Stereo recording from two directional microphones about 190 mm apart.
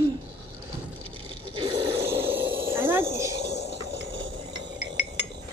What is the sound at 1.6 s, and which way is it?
Snoring, 30° right (ahead or behind).